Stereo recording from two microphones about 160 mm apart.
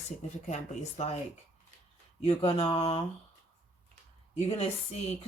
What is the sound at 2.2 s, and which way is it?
Speech, 40° left (ahead or behind).